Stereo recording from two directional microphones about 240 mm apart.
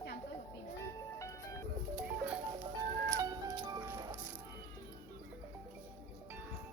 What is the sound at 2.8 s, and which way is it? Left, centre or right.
Music, centre.